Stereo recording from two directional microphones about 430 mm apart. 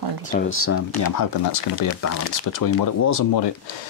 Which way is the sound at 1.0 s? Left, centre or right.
Left.